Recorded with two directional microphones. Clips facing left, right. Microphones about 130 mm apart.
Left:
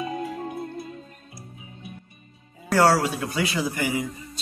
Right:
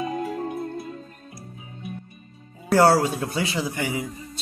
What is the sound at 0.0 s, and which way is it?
Music, 35° right (ahead or behind).